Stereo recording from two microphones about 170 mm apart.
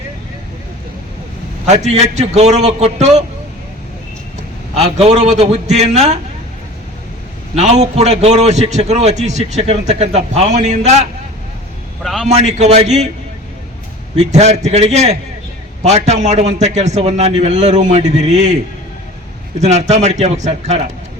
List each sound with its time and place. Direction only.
1.6 s a man's voice: 40° right (ahead or behind)
4.7 s a man's voice: 40° right (ahead or behind)
7.5 s a man's voice: 40° right (ahead or behind)
12.0 s a man's voice: centre (ahead or behind)
12.3 s a man's voice: 40° right (ahead or behind)
14.2 s a man's voice: 40° right (ahead or behind)
19.6 s a man's voice: 40° right (ahead or behind)